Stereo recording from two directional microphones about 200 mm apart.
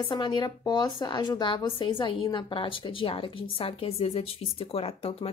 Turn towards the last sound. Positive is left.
turn(degrees=30)  # may be behind; listen again after turning